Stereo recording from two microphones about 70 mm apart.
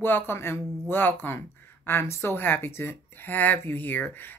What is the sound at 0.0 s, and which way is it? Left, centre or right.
Speech, left.